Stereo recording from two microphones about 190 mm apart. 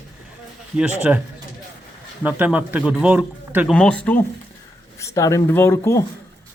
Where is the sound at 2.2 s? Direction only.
10° right (ahead or behind).